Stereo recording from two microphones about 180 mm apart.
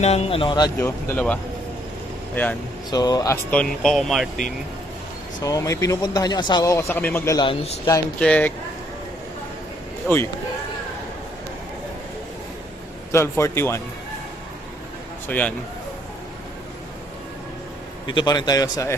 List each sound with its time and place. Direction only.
0.0 s speech: 35° left (ahead or behind); by 2.6 s 10° left (ahead or behind)
2.9 s speech: 20° left (ahead or behind)
3.5 s speech: 5° left (ahead or behind)
5.4 s speech: 20° left (ahead or behind)
7.3 s a man's voice: 30° left (ahead or behind)
8.2 s speech: 10° left (ahead or behind)
10.0 s speech: 5° left (ahead or behind)
13.1 s speech: 15° left (ahead or behind)
15.3 s speech: 10° left (ahead or behind)
18.1 s speech: 25° left (ahead or behind)